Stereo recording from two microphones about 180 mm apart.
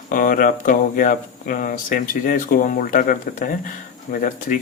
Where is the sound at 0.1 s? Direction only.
50° left (ahead or behind).